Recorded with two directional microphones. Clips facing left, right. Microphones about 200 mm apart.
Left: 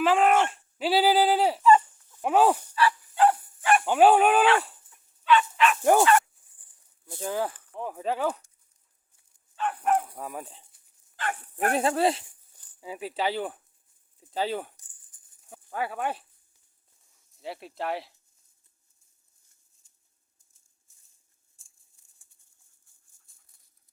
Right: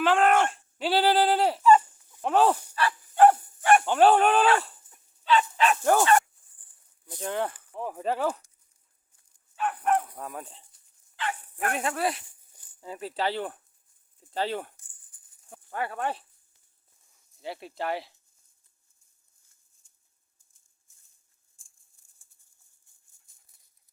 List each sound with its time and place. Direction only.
0.0 s a sound: 5° left (ahead or behind)
2.2 s speech: 10° left (ahead or behind)
2.7 s dog: 50° right (ahead or behind)
3.8 s speech: 5° left (ahead or behind)
4.9 s dog: 30° right (ahead or behind)
5.8 s speech: 15° left (ahead or behind)
7.2 s speech: 5° left (ahead or behind)
9.8 s speech: 5° left (ahead or behind)
11.2 s speech: 45° left (ahead or behind); by 12.2 s 25° left (ahead or behind)
12.5 s a sound: 15° right (ahead or behind)
12.8 s speech: 5° left (ahead or behind)
15.1 s a sound: 45° left (ahead or behind)
15.4 s speech: 5° left (ahead or behind)
17.3 s speech: centre (ahead or behind)